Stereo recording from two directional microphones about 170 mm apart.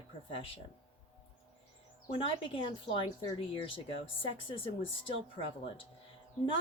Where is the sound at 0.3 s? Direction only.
30° left (ahead or behind).